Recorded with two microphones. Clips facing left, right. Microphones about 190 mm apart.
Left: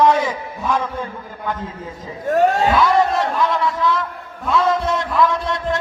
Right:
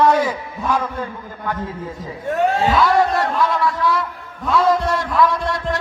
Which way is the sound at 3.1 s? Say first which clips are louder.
Even; centre (ahead or behind).